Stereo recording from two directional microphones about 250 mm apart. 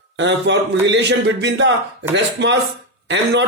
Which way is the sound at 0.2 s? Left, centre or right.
Right.